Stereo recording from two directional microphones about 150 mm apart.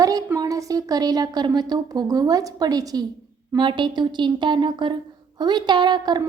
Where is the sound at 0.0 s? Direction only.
25° right (ahead or behind).